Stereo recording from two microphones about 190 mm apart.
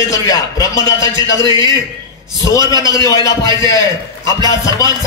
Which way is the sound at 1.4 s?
20° right (ahead or behind).